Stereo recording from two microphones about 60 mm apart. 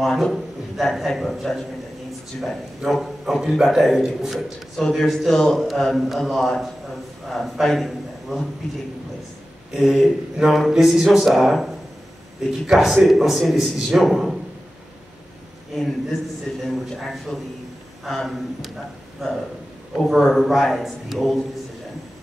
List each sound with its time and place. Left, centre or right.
0.0 s a man's voice: centre
9.8 s a man's voice: centre
15.7 s a man's voice: centre
20.2 s a man's voice: centre